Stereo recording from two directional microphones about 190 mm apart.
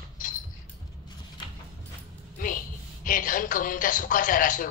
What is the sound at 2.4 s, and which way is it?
A woman's voice, 45° left (ahead or behind).